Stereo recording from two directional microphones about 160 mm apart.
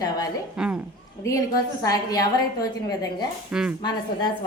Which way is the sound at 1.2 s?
20° left (ahead or behind).